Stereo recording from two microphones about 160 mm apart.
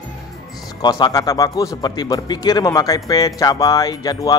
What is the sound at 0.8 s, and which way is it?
Speech, 25° left (ahead or behind).